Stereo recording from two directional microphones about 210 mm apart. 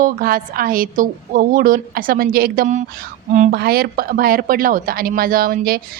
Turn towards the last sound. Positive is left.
turn(degrees=-45)  # may be behind; listen again after turning